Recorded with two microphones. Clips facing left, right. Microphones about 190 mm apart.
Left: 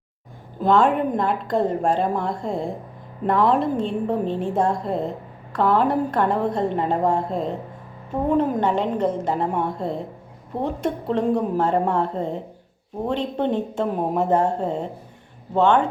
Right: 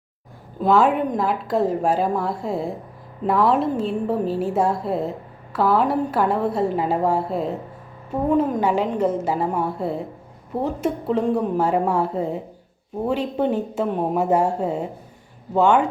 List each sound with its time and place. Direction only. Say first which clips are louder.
0.6 s a woman's voice: even; 5° right (ahead or behind)